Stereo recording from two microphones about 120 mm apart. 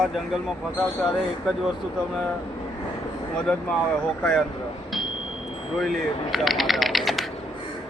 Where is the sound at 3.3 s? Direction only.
5° left (ahead or behind).